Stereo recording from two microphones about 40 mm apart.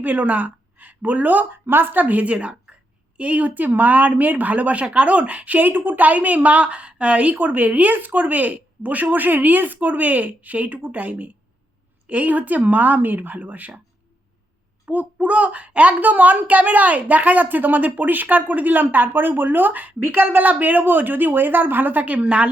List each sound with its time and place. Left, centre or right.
0.0 s speech: right
1.6 s a woman's voice: right
14.8 s a woman's voice: right
22.0 s a woman's voice: right